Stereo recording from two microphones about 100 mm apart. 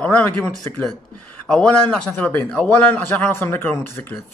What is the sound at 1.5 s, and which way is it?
A man's voice, 10° left (ahead or behind).